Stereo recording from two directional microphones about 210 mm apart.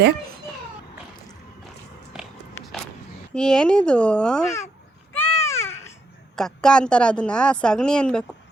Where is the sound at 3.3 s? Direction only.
5° left (ahead or behind).